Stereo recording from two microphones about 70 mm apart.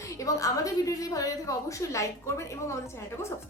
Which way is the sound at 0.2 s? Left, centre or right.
Left.